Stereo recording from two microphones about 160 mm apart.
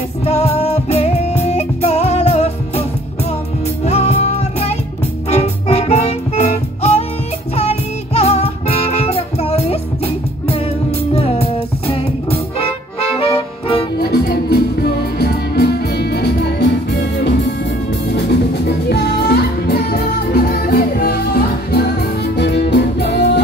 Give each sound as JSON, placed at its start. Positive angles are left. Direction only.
{"t": 0.2, "sound": "music", "side_deg": 40}
{"t": 3.8, "sound": "music", "side_deg": 40}
{"t": 11.1, "sound": "music", "side_deg": 40}
{"t": 13.9, "sound": "music", "side_deg": 75}